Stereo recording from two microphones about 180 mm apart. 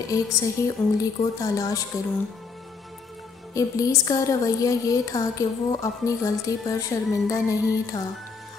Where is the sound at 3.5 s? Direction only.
20° left (ahead or behind).